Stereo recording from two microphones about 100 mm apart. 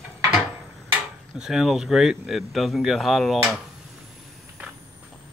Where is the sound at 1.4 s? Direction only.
5° right (ahead or behind).